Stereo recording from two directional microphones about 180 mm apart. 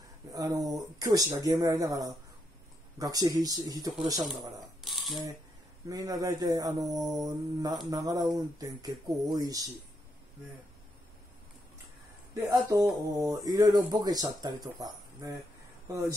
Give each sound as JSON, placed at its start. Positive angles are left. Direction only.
{"t": 0.3, "sound": "speech", "side_deg": -20}
{"t": 4.2, "sound": "speech", "side_deg": 0}
{"t": 5.9, "sound": "speech", "side_deg": -20}
{"t": 12.4, "sound": "speech", "side_deg": -15}